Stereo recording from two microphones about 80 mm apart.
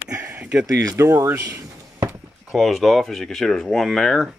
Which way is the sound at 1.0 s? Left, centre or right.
Right.